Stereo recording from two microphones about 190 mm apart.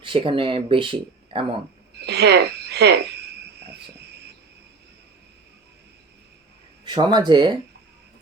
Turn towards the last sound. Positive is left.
turn(degrees=-25)  # may be behind; listen again after turning